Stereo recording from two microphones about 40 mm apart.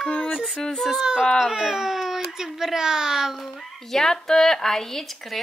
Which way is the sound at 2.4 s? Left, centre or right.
Centre.